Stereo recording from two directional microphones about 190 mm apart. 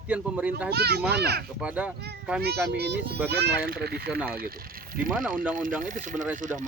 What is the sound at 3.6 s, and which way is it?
Speech, 55° right (ahead or behind).